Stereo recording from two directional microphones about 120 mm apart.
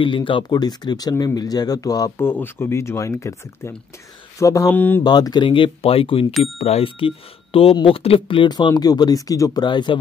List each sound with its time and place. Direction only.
0.0 s speech: 45° left (ahead or behind)
2.1 s speech: 20° left (ahead or behind)
4.7 s speech: 15° left (ahead or behind)
5.0 s speech: 35° left (ahead or behind)